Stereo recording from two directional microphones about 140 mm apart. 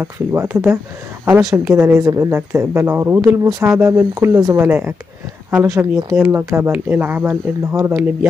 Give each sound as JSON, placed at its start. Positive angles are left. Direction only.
{"t": 0.0, "sound": "a woman's voice", "side_deg": -20}